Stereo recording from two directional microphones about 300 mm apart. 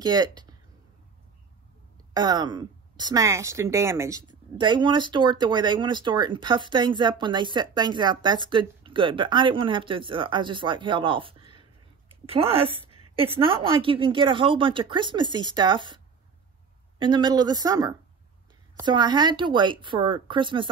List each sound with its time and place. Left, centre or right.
0.0 s speech: centre
2.1 s a woman's voice: centre
17.0 s a woman's voice: centre